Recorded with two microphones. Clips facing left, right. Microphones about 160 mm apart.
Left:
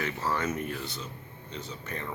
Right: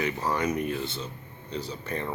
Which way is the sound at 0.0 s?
15° right (ahead or behind).